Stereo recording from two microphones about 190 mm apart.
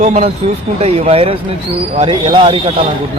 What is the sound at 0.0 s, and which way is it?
Speech, 35° right (ahead or behind).